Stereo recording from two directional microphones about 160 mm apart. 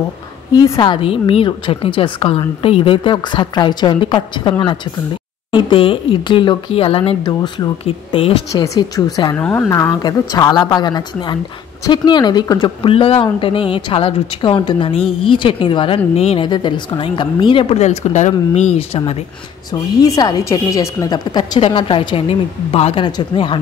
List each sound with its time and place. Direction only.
0.6 s a woman's voice: 25° left (ahead or behind)
7.8 s a woman's voice: 35° left (ahead or behind)
8.5 s a woman's voice: 20° left (ahead or behind)
9.4 s a woman's voice: 10° left (ahead or behind); by 19.1 s 35° left (ahead or behind)
19.7 s a woman's voice: 25° left (ahead or behind)